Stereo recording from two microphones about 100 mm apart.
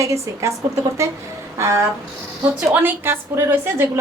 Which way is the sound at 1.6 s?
30° right (ahead or behind).